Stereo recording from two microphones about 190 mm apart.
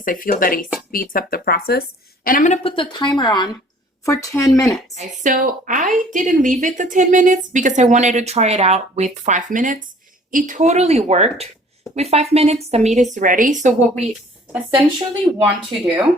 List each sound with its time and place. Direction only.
0.0 s a woman's voice: 45° left (ahead or behind); by 4.7 s 15° left (ahead or behind)
4.9 s a woman's voice: 45° right (ahead or behind)
15.4 s speech: 10° right (ahead or behind)